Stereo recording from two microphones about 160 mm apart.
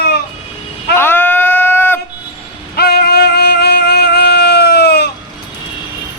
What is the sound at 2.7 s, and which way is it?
Music, 80° left.